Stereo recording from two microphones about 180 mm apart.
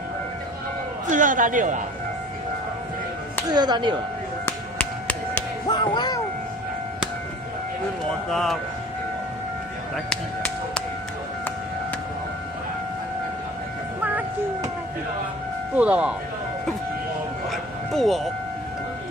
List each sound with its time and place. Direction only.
1.1 s speech: 45° right (ahead or behind)
3.4 s speech: 25° right (ahead or behind)
4.5 s a sound: 10° left (ahead or behind)
5.7 s music: 25° left (ahead or behind)
8.3 s speech: centre (ahead or behind)
10.0 s music: 5° left (ahead or behind)
15.7 s speech: 10° right (ahead or behind)
17.5 s a sound: centre (ahead or behind)